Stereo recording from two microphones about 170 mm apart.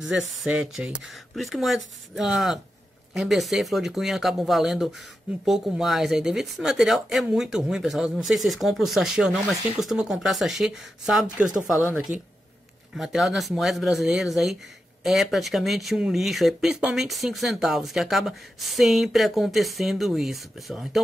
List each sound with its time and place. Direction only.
0.1 s speech: centre (ahead or behind)